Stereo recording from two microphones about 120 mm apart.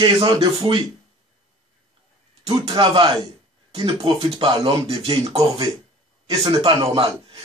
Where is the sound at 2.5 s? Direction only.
30° right (ahead or behind).